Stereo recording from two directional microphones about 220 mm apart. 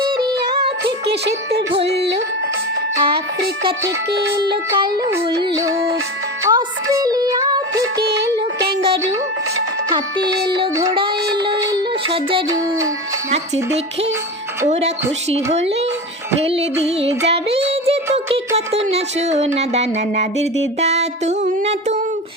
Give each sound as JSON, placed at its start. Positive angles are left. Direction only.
{"t": 0.4, "sound": "music", "side_deg": -45}
{"t": 2.9, "sound": "speech", "side_deg": -25}
{"t": 3.8, "sound": "speech", "side_deg": -50}
{"t": 6.4, "sound": "music", "side_deg": -15}
{"t": 7.9, "sound": "child singing", "side_deg": -45}
{"t": 10.5, "sound": "speech", "side_deg": -20}
{"t": 14.7, "sound": "a woman's voice", "side_deg": -30}
{"t": 16.4, "sound": "speech", "side_deg": -25}
{"t": 17.7, "sound": "music", "side_deg": -25}
{"t": 18.5, "sound": "speech", "side_deg": -30}